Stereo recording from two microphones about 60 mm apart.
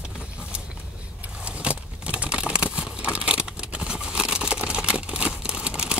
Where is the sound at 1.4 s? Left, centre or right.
Right.